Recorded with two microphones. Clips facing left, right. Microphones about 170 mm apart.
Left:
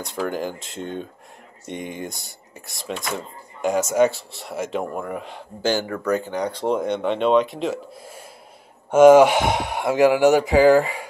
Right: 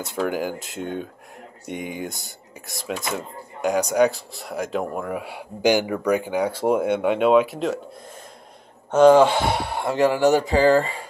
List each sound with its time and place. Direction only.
0.0 s speech: 5° right (ahead or behind)
8.9 s speech: 15° left (ahead or behind)